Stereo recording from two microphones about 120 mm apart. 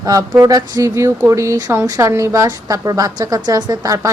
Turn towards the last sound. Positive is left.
turn(degrees=-25)  # may be behind; listen again after turning